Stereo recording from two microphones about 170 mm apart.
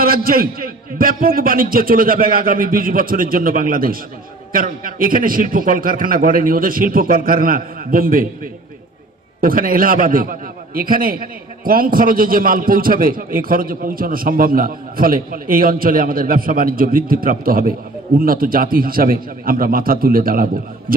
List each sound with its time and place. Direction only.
0.0 s a man's voice: 60° right (ahead or behind)
9.4 s a man's voice: 60° right (ahead or behind)